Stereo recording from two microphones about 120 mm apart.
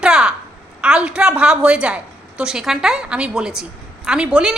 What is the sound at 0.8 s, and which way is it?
A woman's voice, 5° right (ahead or behind).